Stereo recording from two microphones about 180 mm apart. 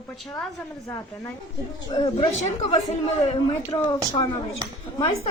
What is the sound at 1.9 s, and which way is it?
A man's voice, 30° left (ahead or behind).